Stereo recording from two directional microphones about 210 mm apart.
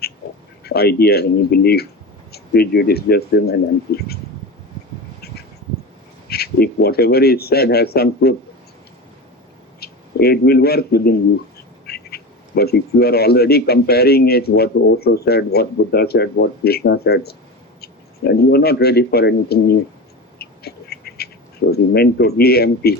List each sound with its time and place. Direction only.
0.6 s speech: 50° left (ahead or behind)
6.2 s speech: 50° left (ahead or behind)
9.8 s speech: 50° left (ahead or behind)
20.4 s duck: 50° left (ahead or behind)
21.7 s speech: 50° left (ahead or behind)